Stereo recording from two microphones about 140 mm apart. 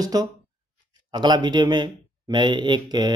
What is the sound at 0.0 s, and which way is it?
Speech, 25° right (ahead or behind).